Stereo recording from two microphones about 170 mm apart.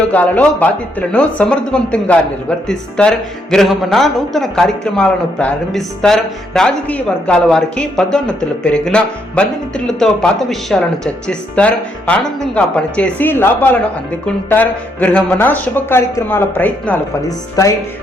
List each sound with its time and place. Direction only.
0.1 s a man's voice: 10° left (ahead or behind)